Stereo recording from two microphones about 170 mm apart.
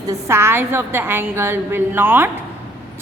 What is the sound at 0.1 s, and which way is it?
A woman's voice, 15° right (ahead or behind).